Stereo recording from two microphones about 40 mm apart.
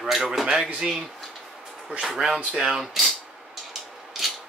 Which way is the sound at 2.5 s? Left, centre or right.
Centre.